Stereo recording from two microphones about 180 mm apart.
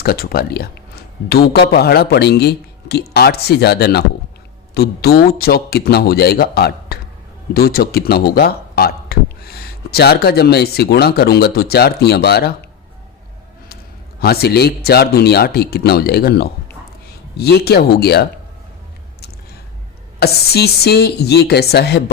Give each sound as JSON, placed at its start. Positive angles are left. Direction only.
{"t": 0.0, "sound": "a man's voice", "side_deg": 55}
{"t": 14.2, "sound": "a man's voice", "side_deg": 60}
{"t": 20.1, "sound": "a man's voice", "side_deg": 60}